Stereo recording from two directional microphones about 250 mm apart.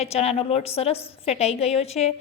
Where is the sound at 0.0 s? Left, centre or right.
Left.